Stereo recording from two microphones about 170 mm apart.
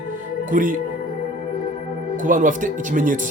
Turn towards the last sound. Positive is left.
turn(degrees=-50)  # may be behind; listen again after turning